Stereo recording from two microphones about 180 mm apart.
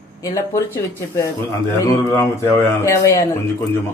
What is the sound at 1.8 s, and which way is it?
Speech, 15° left (ahead or behind).